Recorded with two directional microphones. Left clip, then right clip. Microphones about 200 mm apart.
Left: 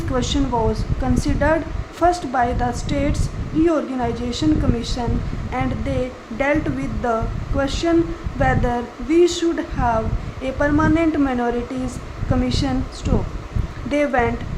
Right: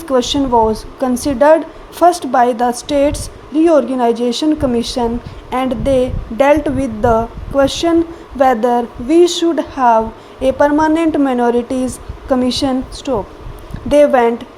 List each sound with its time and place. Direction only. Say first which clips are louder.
0.1 s a woman's voice: right 9 dB; 20° right (ahead or behind)
13.9 s a woman's voice: right 9 dB; 20° right (ahead or behind)